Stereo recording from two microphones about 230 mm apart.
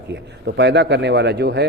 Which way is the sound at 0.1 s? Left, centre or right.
Right.